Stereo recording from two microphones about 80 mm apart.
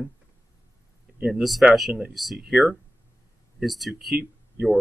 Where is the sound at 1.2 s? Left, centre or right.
Centre.